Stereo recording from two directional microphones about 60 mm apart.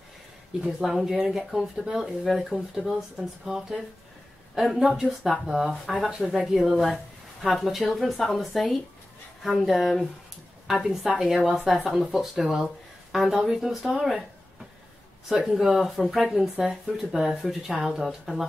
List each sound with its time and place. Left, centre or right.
0.7 s speech: centre
15.4 s speech: centre